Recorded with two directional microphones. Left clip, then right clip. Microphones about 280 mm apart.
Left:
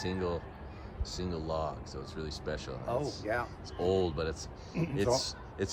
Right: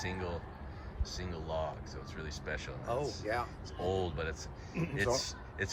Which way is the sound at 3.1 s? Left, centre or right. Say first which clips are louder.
Left 2 dB; left.